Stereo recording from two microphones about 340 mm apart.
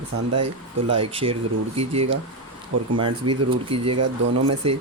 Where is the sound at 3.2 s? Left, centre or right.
Right.